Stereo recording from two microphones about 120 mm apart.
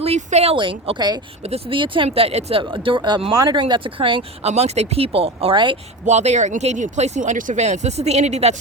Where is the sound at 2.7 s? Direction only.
45° right (ahead or behind).